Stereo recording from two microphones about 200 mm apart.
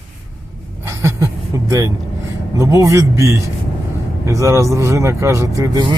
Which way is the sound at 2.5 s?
15° right (ahead or behind).